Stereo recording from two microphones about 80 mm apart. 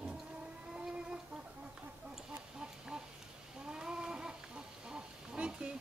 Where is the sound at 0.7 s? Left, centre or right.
Centre.